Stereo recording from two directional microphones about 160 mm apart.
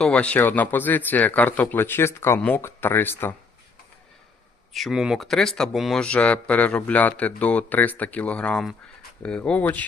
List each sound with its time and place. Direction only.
0.0 s speech: 5° left (ahead or behind)
4.7 s speech: centre (ahead or behind)